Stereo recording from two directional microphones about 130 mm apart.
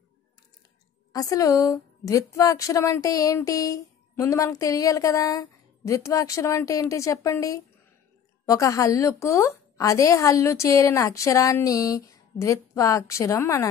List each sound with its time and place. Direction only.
1.1 s a woman's voice: 25° left (ahead or behind)